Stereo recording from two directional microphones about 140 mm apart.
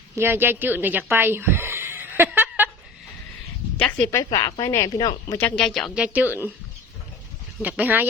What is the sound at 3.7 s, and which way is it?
Speech, 10° left (ahead or behind).